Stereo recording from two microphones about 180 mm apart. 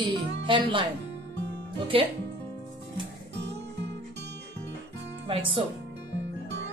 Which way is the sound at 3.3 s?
75° right (ahead or behind).